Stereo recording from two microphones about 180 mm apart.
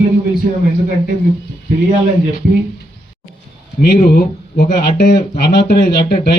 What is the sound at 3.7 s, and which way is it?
Speech, 55° left (ahead or behind).